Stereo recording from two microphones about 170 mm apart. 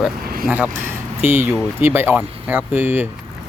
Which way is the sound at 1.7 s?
10° right (ahead or behind).